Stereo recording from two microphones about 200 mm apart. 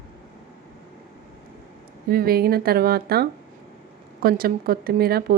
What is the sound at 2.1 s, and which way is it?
A woman's voice, 50° right (ahead or behind).